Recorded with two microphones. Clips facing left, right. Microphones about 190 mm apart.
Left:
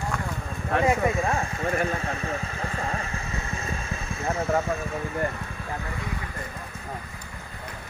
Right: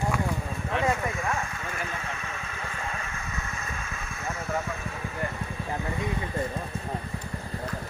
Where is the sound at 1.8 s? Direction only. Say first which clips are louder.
Left 7 dB; 35° left (ahead or behind).